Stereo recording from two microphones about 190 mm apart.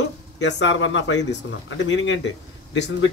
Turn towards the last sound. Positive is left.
turn(degrees=70)  # may be behind; listen again after turning